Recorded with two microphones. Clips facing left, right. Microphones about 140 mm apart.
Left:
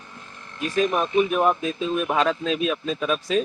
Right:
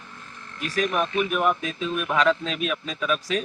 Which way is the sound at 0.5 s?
25° left (ahead or behind).